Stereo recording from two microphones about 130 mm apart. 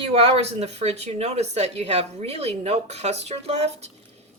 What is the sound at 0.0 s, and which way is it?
Speech, 50° right (ahead or behind).